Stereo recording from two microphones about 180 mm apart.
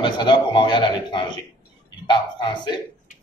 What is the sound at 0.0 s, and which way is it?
A man's voice, 25° left (ahead or behind).